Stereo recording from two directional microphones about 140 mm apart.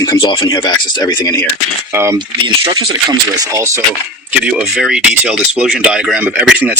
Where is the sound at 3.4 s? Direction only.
20° right (ahead or behind).